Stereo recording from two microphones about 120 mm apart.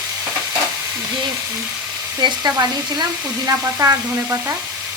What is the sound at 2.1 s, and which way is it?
Frying, 35° right (ahead or behind).